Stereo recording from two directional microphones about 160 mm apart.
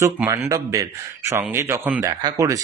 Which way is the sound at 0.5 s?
20° right (ahead or behind).